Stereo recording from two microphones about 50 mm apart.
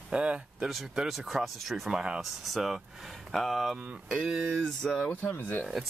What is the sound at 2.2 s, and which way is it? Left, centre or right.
Speech, centre.